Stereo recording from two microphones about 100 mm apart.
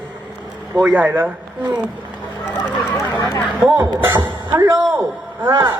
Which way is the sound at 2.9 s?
35° left (ahead or behind).